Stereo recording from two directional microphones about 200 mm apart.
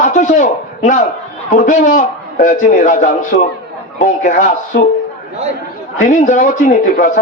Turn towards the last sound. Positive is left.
turn(degrees=40)  # may be behind; listen again after turning